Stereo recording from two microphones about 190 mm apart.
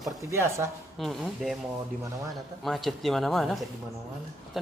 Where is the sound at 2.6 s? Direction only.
Centre (ahead or behind).